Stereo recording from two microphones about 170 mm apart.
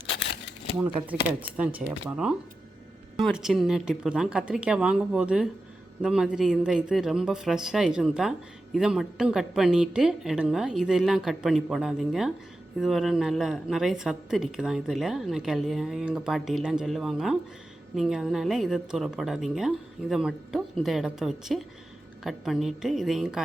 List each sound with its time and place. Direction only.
0.8 s speech: 10° right (ahead or behind)